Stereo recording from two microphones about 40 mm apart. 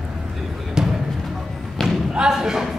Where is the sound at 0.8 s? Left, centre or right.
Centre.